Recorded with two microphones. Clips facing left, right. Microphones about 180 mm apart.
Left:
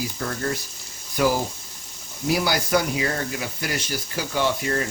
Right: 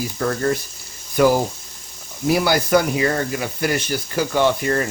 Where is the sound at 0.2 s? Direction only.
60° right (ahead or behind).